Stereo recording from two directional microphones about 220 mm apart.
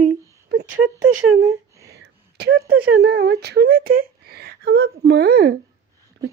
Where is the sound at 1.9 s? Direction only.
45° right (ahead or behind).